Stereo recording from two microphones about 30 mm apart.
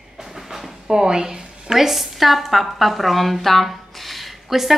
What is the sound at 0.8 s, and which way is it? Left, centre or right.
A woman's voice, right.